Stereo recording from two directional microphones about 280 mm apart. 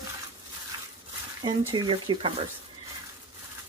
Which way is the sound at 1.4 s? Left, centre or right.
Centre.